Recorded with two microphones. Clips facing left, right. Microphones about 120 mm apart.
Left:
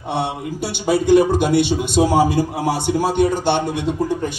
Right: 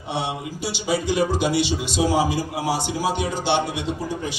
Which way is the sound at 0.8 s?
55° left (ahead or behind).